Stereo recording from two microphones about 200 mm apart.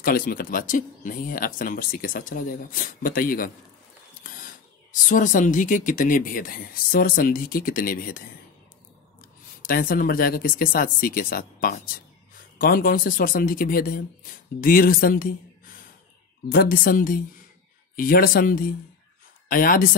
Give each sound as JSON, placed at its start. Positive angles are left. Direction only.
{"t": 0.0, "sound": "speech", "side_deg": 45}
{"t": 5.0, "sound": "speech", "side_deg": 40}
{"t": 9.6, "sound": "speech", "side_deg": 45}
{"t": 16.4, "sound": "speech", "side_deg": 50}